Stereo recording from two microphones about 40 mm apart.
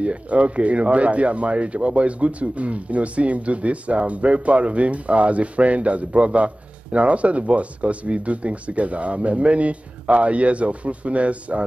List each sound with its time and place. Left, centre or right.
0.0 s speech: right